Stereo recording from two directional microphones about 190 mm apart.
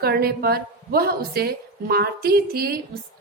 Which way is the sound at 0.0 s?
55° right (ahead or behind).